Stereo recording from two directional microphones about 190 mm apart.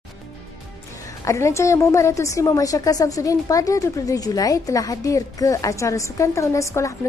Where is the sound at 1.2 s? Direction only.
15° left (ahead or behind).